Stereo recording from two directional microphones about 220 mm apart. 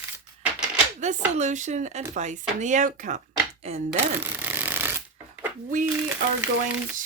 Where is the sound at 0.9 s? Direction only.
30° right (ahead or behind).